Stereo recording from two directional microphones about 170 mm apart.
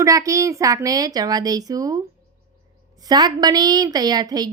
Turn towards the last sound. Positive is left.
turn(degrees=-25)  # may be behind; listen again after turning